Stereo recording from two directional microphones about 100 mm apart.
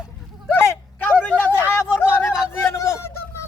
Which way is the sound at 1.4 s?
20° left (ahead or behind).